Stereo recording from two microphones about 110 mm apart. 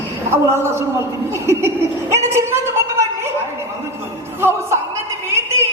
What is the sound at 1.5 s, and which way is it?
Laughter, 25° right (ahead or behind).